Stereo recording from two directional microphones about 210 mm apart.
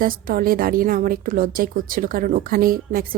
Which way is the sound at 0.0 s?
40° right (ahead or behind).